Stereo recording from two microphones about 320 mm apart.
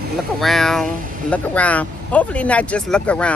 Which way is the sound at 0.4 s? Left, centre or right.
Centre.